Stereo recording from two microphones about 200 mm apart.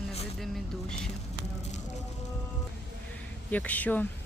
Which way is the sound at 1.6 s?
35° left (ahead or behind).